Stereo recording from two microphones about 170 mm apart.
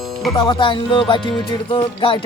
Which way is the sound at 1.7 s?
30° left (ahead or behind).